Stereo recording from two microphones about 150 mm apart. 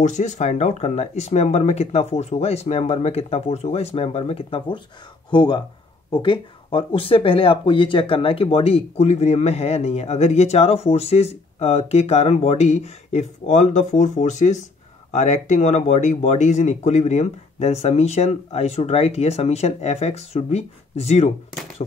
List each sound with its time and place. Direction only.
0.0 s speech: 50° left (ahead or behind)